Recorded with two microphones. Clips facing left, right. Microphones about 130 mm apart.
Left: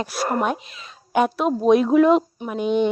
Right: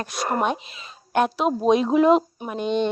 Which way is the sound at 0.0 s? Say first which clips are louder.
Left 1 dB; 5° left (ahead or behind).